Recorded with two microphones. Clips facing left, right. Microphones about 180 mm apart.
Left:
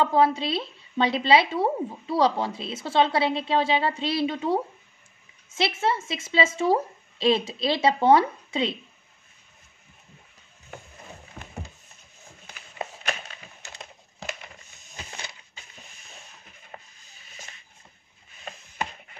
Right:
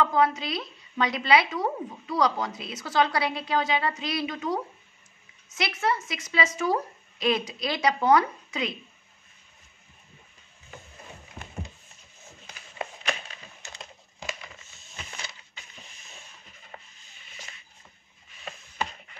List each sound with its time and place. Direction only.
0.0 s speech: 30° left (ahead or behind)
15.0 s crushing: 35° left (ahead or behind)
16.7 s rub: 35° left (ahead or behind)
18.4 s chopping: 40° left (ahead or behind)